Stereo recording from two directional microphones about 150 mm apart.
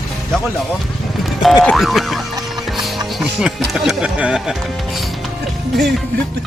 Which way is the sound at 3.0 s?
Centre (ahead or behind).